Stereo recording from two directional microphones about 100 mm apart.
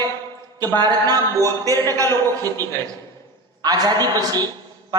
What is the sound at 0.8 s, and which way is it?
Speech, 40° right (ahead or behind).